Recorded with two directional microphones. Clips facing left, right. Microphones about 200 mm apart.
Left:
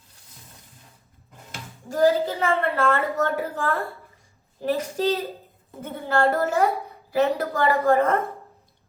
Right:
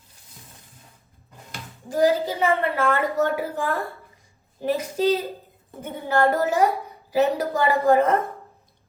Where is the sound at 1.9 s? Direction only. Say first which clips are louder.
Even; 15° right (ahead or behind).